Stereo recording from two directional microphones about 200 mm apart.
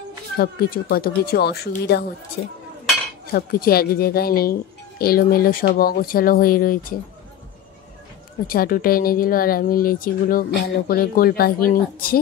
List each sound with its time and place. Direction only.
0.4 s a woman's voice: 50° left (ahead or behind)
8.5 s a woman's voice: 45° left (ahead or behind)